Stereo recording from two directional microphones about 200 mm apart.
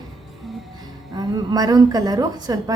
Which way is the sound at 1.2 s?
20° right (ahead or behind).